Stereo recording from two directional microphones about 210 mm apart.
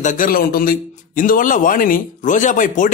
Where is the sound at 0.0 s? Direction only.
40° left (ahead or behind).